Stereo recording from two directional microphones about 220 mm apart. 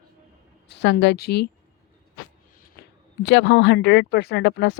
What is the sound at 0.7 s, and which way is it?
Speech, 55° left (ahead or behind).